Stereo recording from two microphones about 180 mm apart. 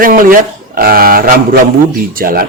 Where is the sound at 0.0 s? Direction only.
50° right (ahead or behind).